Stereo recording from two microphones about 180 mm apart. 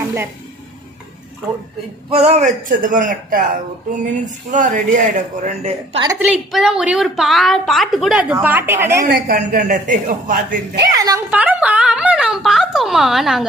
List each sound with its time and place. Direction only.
2.0 s a man's voice: 35° right (ahead or behind)
6.1 s a woman's voice: 10° right (ahead or behind)
9.0 s a man's voice: 50° right (ahead or behind)
10.9 s a woman's voice: 20° right (ahead or behind)
11.3 s a woman's voice: 10° right (ahead or behind)